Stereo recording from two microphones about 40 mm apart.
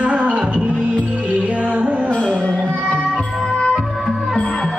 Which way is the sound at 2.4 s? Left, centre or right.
Left.